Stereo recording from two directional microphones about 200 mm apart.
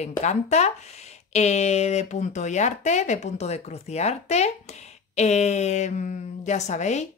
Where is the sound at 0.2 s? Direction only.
35° left (ahead or behind).